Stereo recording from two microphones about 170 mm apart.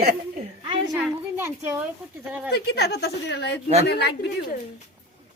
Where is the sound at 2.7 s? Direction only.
70° left (ahead or behind).